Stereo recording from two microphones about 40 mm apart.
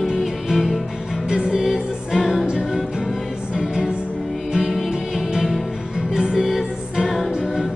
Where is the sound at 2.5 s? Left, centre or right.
Right.